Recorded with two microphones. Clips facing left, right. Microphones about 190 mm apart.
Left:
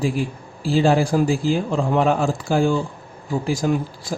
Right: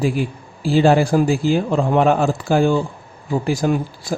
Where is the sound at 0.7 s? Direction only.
65° right (ahead or behind).